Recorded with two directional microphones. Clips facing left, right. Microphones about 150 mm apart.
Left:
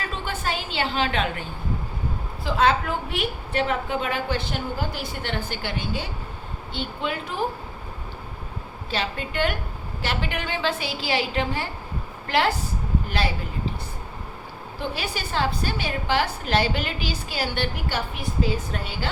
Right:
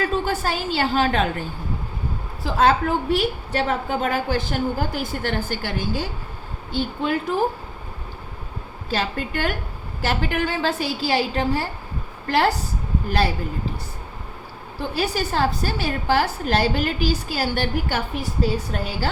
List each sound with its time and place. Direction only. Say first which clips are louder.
0.0 s a woman's voice: right 7 dB; 45° right (ahead or behind)
2.4 s a woman's voice: right 3 dB; 45° right (ahead or behind)
8.9 s a woman's voice: right 4 dB; 45° right (ahead or behind)
14.8 s a woman's voice: right 6 dB; 40° right (ahead or behind)